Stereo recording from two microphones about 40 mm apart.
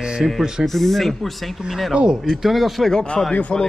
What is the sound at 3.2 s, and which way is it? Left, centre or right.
Speech, centre.